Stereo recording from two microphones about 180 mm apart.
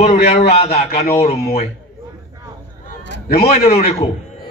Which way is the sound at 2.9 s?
55° left (ahead or behind).